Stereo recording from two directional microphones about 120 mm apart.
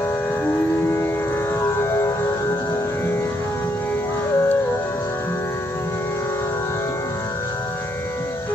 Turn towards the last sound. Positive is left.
turn(degrees=25)  # may be behind; listen again after turning